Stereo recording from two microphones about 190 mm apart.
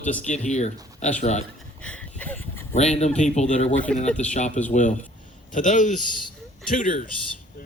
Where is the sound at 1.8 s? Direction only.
10° left (ahead or behind).